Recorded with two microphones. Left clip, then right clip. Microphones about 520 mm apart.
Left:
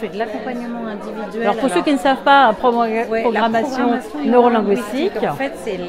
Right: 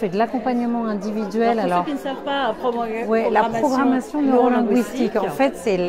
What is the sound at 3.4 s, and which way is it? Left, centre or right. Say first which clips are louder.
A woman's voice: left 2 dB; left.